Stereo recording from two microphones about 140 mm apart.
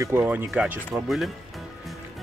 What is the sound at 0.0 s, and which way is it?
Speech, 15° right (ahead or behind).